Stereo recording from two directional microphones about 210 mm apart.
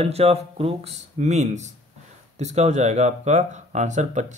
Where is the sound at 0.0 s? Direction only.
30° right (ahead or behind).